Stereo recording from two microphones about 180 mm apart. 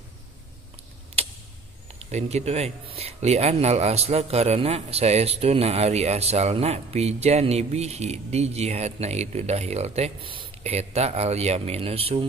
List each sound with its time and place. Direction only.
1.2 s tick-tock: 35° right (ahead or behind)
2.0 s speech: 40° right (ahead or behind)